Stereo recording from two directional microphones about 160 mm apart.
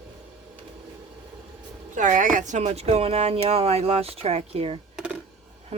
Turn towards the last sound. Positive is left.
turn(degrees=-40)  # may be behind; listen again after turning